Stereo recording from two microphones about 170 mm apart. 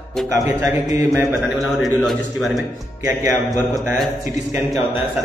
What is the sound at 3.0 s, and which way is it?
A man's voice, 20° right (ahead or behind).